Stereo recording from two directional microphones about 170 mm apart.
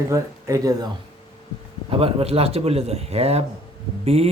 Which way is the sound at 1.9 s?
35° right (ahead or behind).